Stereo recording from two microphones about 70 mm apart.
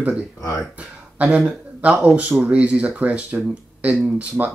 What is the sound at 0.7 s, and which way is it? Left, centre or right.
Speech, right.